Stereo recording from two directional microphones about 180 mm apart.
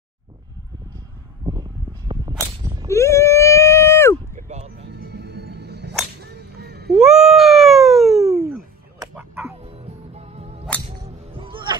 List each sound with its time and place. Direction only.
1.4 s a sound: 20° right (ahead or behind)
2.9 s a sound: 15° left (ahead or behind)
4.4 s music: 40° right (ahead or behind)
4.8 s music: 65° right (ahead or behind)
6.9 s cat: centre (ahead or behind)
9.1 s music: 15° right (ahead or behind)
9.6 s music: 35° right (ahead or behind)